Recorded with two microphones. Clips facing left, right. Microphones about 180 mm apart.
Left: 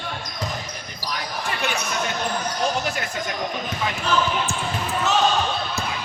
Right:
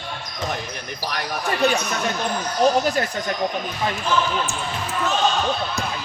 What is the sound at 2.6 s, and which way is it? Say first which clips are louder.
Speech: right 8 dB; 40° right (ahead or behind).